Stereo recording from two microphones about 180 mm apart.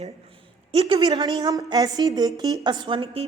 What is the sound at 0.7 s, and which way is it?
A woman's voice, 30° right (ahead or behind).